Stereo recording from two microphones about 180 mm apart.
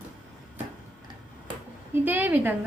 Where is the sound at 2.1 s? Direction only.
10° right (ahead or behind).